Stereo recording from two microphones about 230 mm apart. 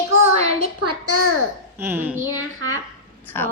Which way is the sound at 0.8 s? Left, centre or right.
Right.